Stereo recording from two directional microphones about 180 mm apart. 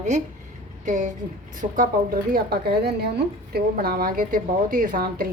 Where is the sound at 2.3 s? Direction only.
60° right (ahead or behind).